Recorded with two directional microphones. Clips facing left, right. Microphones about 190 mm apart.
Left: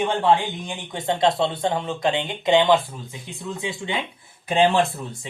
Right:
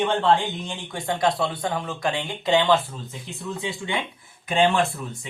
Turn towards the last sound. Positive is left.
turn(degrees=35)  # may be behind; listen again after turning